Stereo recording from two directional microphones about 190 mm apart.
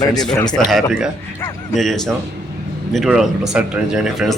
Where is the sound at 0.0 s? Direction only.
20° left (ahead or behind).